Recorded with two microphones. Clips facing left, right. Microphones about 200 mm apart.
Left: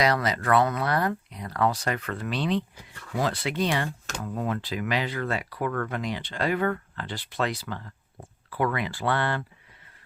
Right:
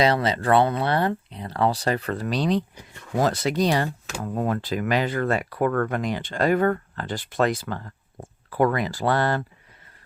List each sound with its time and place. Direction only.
0.0 s speech: 30° right (ahead or behind)